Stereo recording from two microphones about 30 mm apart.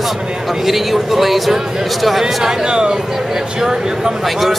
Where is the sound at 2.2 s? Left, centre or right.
Right.